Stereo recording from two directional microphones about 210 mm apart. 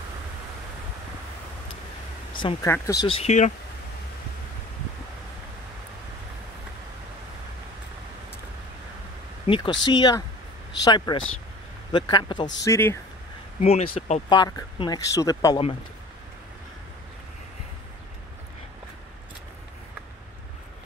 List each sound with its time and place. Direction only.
2.3 s speech: 25° left (ahead or behind)
9.5 s speech: 25° left (ahead or behind)
13.6 s speech: 35° left (ahead or behind)
14.3 s speech: 20° left (ahead or behind)